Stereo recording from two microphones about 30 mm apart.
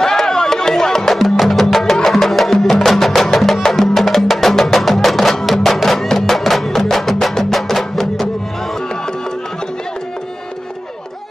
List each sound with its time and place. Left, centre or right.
0.0 s music: centre
1.1 s music: centre